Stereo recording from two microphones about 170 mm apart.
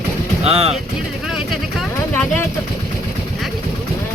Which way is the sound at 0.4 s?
35° right (ahead or behind).